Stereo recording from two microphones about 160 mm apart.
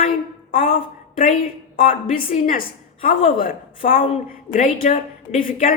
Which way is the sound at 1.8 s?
60° left (ahead or behind).